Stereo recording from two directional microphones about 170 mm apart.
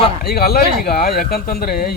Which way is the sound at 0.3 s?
60° left (ahead or behind).